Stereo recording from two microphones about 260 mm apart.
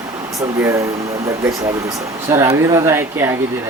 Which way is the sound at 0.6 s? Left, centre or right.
Centre.